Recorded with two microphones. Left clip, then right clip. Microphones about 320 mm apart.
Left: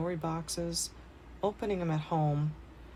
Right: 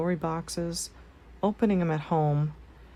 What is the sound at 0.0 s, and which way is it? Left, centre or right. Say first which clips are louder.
Speech: right 5 dB; right.